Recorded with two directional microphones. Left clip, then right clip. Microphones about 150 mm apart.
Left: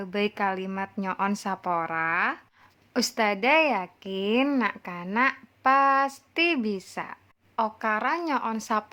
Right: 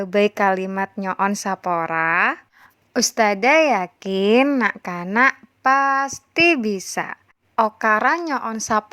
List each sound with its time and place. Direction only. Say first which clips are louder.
0.0 s a woman's voice: right 10 dB; 45° right (ahead or behind)
5.6 s child singing: right 4 dB; 30° right (ahead or behind)
6.3 s a woman's voice: right 10 dB; 40° right (ahead or behind)